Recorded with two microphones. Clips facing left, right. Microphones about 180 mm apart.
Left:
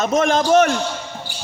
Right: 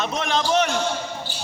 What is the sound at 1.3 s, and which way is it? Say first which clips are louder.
Music: even; 15° left (ahead or behind).